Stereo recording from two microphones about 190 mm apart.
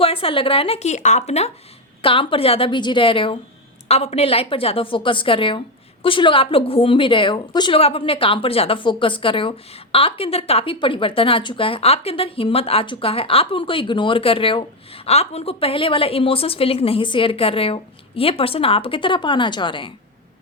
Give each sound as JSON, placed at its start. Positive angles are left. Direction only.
{"t": 0.0, "sound": "a woman's voice", "side_deg": 30}